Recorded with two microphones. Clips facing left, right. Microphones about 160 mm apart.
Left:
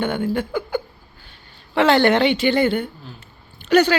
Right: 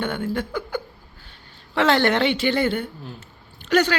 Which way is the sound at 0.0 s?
5° left (ahead or behind).